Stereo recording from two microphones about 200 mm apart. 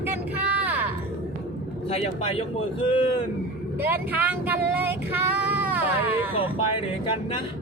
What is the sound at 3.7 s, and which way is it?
Female singing, 10° right (ahead or behind).